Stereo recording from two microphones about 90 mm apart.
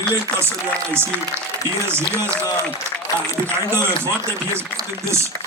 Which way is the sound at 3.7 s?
30° right (ahead or behind).